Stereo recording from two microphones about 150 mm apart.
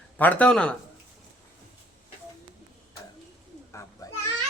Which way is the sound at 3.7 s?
20° left (ahead or behind).